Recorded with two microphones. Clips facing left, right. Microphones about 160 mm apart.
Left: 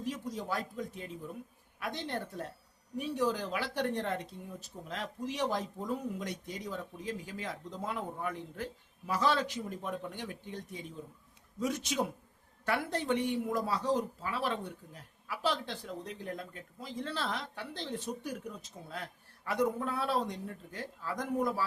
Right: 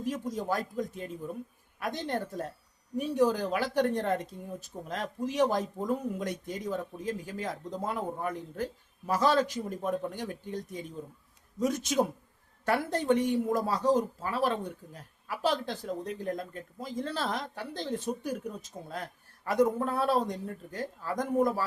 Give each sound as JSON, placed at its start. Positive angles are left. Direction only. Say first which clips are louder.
{"t": 0.0, "sound": "speech", "louder": "right 5 dB", "side_deg": -45}